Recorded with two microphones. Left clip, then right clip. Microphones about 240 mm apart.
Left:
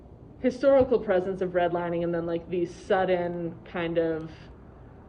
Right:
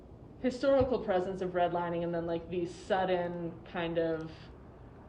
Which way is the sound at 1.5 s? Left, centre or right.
Right.